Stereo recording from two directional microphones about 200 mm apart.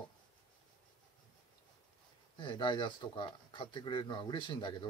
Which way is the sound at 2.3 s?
25° left (ahead or behind).